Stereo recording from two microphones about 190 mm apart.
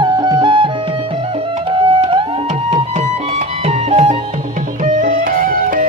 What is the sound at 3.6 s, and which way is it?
Music, 35° right (ahead or behind).